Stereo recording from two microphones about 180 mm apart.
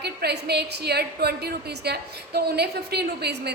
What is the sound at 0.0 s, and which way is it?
A woman's voice, 65° right (ahead or behind).